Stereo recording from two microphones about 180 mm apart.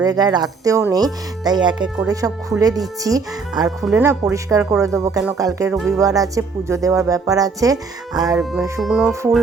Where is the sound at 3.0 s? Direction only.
20° right (ahead or behind).